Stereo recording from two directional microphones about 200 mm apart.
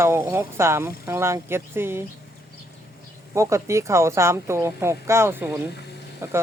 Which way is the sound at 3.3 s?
15° right (ahead or behind).